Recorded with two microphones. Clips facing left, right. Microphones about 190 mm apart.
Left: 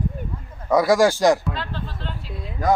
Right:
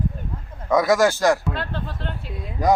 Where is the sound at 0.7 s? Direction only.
10° left (ahead or behind).